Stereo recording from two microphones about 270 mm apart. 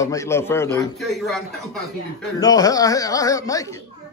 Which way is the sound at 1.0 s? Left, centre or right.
Centre.